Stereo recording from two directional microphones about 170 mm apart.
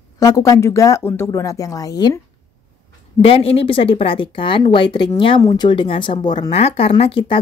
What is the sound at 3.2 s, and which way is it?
Speech, 35° left (ahead or behind).